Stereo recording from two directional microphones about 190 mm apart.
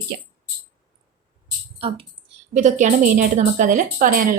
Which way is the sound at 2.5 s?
40° right (ahead or behind).